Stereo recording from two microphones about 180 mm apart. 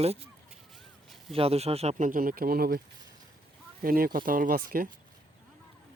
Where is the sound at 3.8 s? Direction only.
55° right (ahead or behind).